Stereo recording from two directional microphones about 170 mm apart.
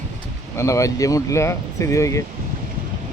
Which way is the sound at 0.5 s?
15° left (ahead or behind).